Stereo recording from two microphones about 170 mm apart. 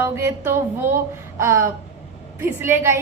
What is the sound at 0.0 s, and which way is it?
A woman's voice, 15° right (ahead or behind).